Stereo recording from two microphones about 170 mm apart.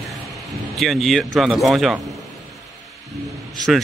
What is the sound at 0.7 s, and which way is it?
Speech, centre (ahead or behind).